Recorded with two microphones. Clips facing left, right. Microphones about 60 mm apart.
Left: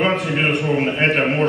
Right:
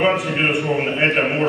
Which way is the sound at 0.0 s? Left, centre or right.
Centre.